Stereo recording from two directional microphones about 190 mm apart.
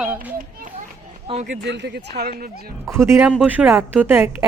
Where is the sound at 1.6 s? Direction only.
65° right (ahead or behind); by 2.7 s 50° right (ahead or behind).